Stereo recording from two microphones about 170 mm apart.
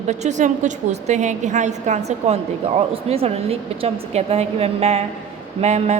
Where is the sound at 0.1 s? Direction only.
45° right (ahead or behind).